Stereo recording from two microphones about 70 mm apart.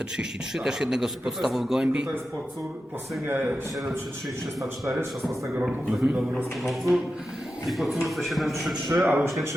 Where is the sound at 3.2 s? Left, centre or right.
Right.